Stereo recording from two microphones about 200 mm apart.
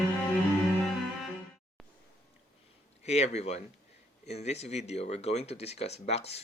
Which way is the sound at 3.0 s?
35° left (ahead or behind).